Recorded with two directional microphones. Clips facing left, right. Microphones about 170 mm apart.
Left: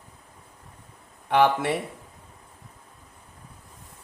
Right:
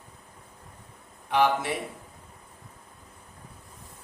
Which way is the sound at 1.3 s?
65° left (ahead or behind).